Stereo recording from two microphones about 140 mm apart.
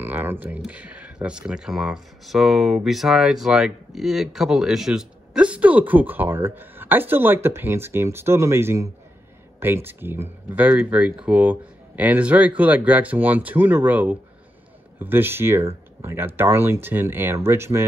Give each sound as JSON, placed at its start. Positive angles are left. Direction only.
{"t": 0.0, "sound": "speech", "side_deg": -15}